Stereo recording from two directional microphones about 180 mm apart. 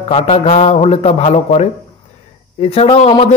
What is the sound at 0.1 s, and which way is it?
A man's voice, 35° left (ahead or behind).